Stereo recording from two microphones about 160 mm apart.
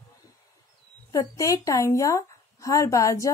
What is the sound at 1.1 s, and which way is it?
Speech, 20° left (ahead or behind).